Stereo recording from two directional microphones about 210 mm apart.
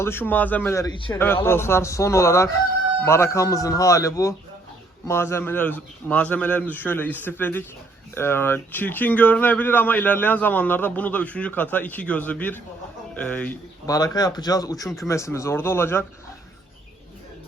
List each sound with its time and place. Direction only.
0.0 s speech: 10° left (ahead or behind)
1.1 s speech: 10° left (ahead or behind)